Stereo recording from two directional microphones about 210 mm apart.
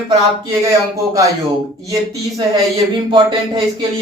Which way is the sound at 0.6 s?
15° right (ahead or behind).